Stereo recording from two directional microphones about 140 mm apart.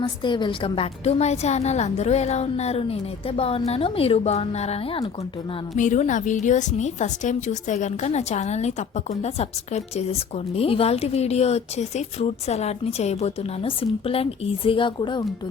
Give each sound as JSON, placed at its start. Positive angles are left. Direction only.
{"t": 0.0, "sound": "a woman's voice", "side_deg": 35}
{"t": 5.7, "sound": "a woman's voice", "side_deg": 60}